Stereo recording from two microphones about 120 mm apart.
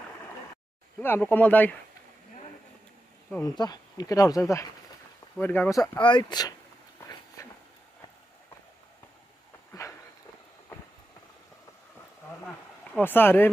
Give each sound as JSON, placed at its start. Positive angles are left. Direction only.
{"t": 0.9, "sound": "speech", "side_deg": 15}
{"t": 3.4, "sound": "speech", "side_deg": 35}
{"t": 5.9, "sound": "speech", "side_deg": 40}
{"t": 7.4, "sound": "a sound", "side_deg": 30}
{"t": 9.7, "sound": "a sound", "side_deg": 25}
{"t": 12.9, "sound": "speech", "side_deg": 15}